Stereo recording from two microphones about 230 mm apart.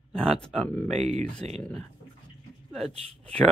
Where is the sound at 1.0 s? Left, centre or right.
Right.